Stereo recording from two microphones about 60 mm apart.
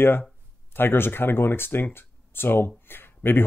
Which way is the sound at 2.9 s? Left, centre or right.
Left.